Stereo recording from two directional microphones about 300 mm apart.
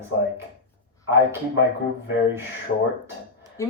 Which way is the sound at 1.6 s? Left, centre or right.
Left.